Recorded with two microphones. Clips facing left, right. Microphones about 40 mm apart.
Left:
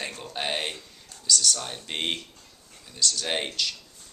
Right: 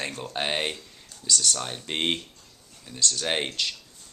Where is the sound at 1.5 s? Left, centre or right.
Centre.